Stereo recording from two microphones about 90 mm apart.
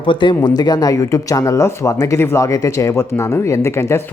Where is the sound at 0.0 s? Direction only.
60° left (ahead or behind).